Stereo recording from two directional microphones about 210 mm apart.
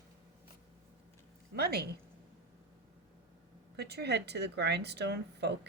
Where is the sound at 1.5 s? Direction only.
50° right (ahead or behind).